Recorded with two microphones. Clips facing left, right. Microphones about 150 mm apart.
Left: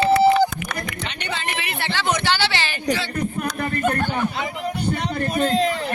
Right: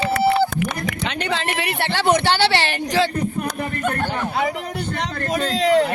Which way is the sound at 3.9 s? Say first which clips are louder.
Left 1 dB; centre (ahead or behind).